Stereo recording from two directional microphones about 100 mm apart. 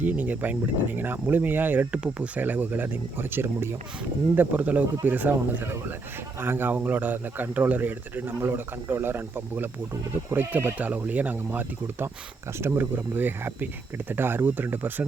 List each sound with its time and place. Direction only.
0.0 s speech: 15° right (ahead or behind)